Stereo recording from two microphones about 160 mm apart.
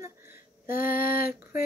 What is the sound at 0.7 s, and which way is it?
Female singing, 60° left (ahead or behind).